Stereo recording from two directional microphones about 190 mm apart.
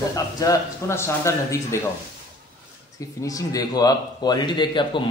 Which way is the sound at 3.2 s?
20° left (ahead or behind).